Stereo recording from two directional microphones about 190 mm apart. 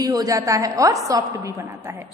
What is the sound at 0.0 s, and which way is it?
A woman's voice, 20° right (ahead or behind).